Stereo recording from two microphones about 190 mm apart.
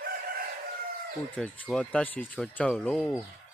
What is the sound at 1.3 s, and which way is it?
Speech, 5° left (ahead or behind).